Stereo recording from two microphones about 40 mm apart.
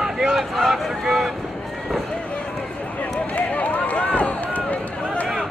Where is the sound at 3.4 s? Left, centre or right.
Left.